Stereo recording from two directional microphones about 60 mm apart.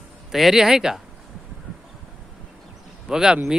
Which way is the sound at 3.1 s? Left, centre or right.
Centre.